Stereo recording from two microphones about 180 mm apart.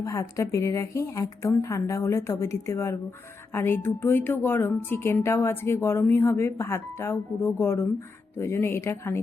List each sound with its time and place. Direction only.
0.0 s a woman's voice: 15° left (ahead or behind)